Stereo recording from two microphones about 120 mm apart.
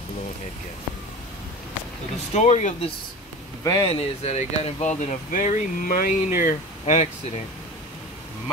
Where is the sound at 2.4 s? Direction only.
75° left (ahead or behind).